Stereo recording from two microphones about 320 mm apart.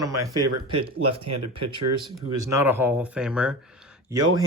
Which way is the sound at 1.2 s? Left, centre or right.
Right.